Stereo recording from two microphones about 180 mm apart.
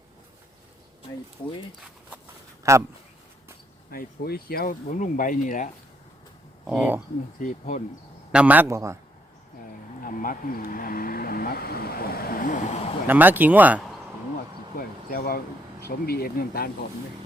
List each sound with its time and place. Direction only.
2.6 s speech: 15° right (ahead or behind)
3.9 s speech: 60° left (ahead or behind)
6.7 s speech: 5° right (ahead or behind)
7.3 s speech: 45° left (ahead or behind)
8.3 s speech: 5° right (ahead or behind)
10.0 s speech: 50° left (ahead or behind)
13.1 s speech: 10° right (ahead or behind)
14.8 s speech: 55° left (ahead or behind)